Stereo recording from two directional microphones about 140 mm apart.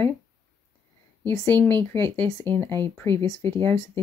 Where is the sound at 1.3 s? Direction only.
10° left (ahead or behind).